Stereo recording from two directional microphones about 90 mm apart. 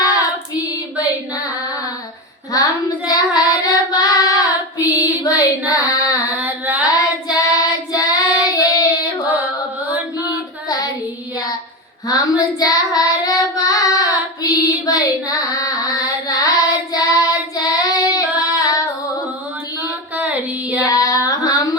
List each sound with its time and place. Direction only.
0.0 s child singing: 40° left (ahead or behind)
3.1 s child singing: 45° left (ahead or behind)
6.3 s singing: 15° right (ahead or behind)
6.8 s child singing: 40° left (ahead or behind)
10.7 s child singing: 40° left (ahead or behind)
12.0 s child singing: 40° left (ahead or behind)
20.1 s child singing: 15° right (ahead or behind)
20.8 s child singing: 40° left (ahead or behind)